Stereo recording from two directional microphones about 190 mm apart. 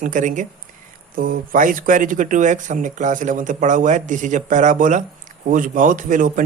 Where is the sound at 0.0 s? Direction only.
45° right (ahead or behind).